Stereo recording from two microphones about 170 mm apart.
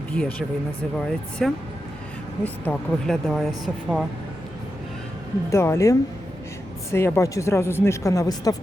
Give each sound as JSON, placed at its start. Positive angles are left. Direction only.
{"t": 0.9, "sound": "speech", "side_deg": 5}
{"t": 3.2, "sound": "speech", "side_deg": 0}
{"t": 5.5, "sound": "speech", "side_deg": 15}